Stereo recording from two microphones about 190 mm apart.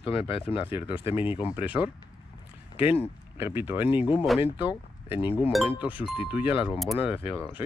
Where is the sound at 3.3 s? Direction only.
10° right (ahead or behind).